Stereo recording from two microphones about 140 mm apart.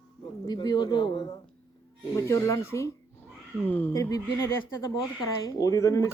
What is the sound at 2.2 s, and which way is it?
Speech, 20° left (ahead or behind).